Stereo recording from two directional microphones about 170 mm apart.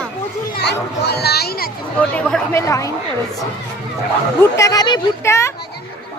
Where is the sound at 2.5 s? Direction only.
20° left (ahead or behind).